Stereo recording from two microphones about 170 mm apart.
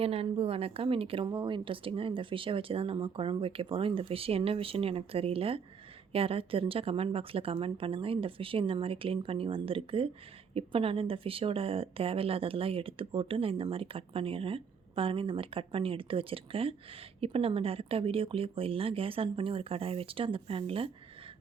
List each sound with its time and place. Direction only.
0.0 s a woman's voice: 35° right (ahead or behind)